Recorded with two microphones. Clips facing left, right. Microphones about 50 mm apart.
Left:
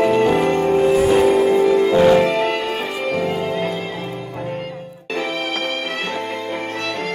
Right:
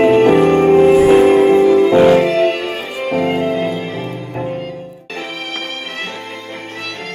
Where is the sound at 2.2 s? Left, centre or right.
Centre.